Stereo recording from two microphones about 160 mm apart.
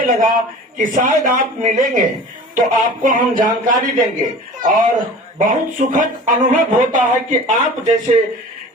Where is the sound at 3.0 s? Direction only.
55° right (ahead or behind).